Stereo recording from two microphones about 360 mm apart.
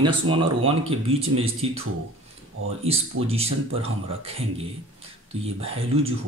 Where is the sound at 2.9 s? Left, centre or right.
Centre.